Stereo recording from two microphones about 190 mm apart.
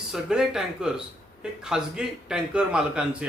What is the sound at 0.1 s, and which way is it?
A man's voice, centre (ahead or behind).